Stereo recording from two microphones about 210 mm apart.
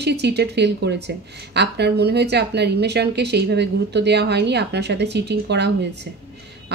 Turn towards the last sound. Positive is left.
turn(degrees=-55)  # may be behind; listen again after turning